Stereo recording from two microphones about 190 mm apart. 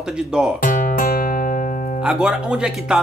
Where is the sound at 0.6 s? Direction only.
45° left (ahead or behind).